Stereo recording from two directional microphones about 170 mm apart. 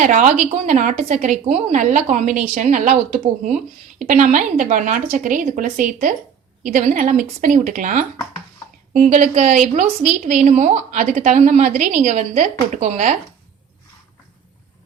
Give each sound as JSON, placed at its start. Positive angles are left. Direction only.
{"t": 0.0, "sound": "a woman's voice", "side_deg": -45}